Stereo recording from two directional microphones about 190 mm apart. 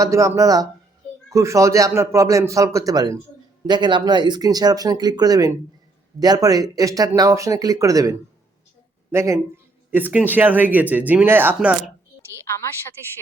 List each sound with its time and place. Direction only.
0.0 s a man's voice: 15° right (ahead or behind)
9.1 s a man's voice: 15° right (ahead or behind)
13.0 s speech: 15° left (ahead or behind)